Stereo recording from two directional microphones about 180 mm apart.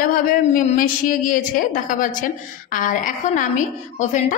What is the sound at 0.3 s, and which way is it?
A woman's voice, 50° left (ahead or behind).